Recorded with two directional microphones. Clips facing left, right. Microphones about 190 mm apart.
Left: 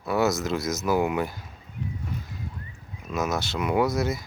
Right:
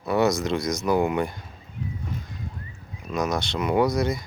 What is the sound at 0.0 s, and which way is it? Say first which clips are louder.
Speech: right 2 dB; centre (ahead or behind).